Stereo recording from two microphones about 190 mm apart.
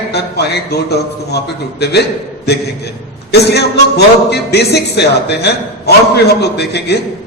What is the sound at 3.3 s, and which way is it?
A man's voice, 60° left (ahead or behind).